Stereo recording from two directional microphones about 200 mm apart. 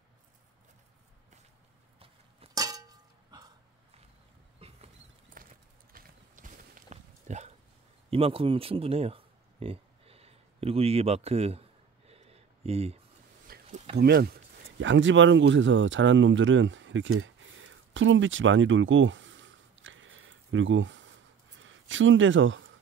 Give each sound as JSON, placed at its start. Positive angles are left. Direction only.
{"t": 2.0, "sound": "a sound", "side_deg": -30}
{"t": 2.6, "sound": "clang", "side_deg": -20}
{"t": 4.6, "sound": "rodents", "side_deg": -30}
{"t": 5.4, "sound": "clip-clop", "side_deg": -45}
{"t": 8.1, "sound": "speech", "side_deg": -30}
{"t": 12.1, "sound": "a sound", "side_deg": -30}
{"t": 13.9, "sound": "speech", "side_deg": -50}
{"t": 14.8, "sound": "speech", "side_deg": -70}
{"t": 21.5, "sound": "a sound", "side_deg": -70}